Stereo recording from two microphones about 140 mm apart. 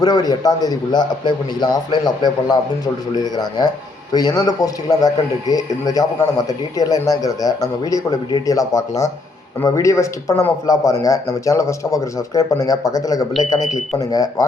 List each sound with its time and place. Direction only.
0.0 s a man's voice: 30° left (ahead or behind)